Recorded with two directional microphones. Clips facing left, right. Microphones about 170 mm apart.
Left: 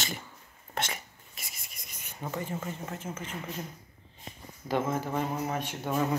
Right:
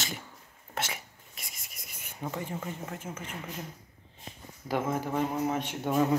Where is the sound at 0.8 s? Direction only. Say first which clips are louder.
Left 1 dB; 5° right (ahead or behind).